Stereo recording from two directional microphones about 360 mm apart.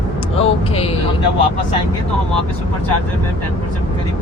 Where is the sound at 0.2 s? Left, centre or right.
Centre.